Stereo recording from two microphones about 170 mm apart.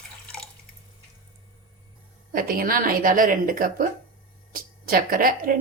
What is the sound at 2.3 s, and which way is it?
Speech, 55° right (ahead or behind).